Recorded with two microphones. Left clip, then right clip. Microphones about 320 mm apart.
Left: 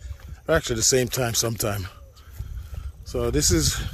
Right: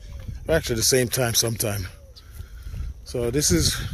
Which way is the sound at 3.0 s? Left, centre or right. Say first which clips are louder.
Even; centre.